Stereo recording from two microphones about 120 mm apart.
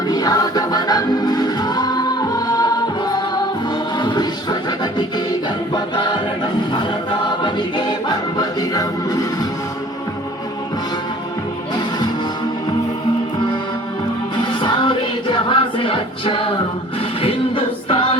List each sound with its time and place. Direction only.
0.1 s music: 35° left (ahead or behind)
5.7 s choir: 40° left (ahead or behind)
14.3 s music: 40° left (ahead or behind)